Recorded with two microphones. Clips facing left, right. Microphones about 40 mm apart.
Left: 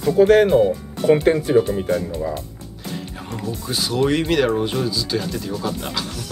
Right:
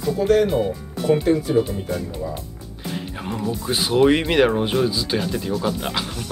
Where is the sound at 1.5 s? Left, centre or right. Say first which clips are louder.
Left 3 dB; centre.